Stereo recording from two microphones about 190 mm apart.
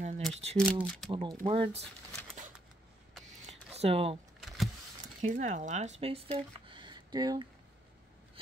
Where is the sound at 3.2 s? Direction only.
35° right (ahead or behind).